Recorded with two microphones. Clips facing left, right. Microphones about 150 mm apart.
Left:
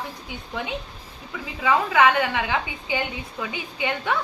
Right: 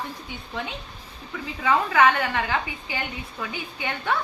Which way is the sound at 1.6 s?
10° left (ahead or behind).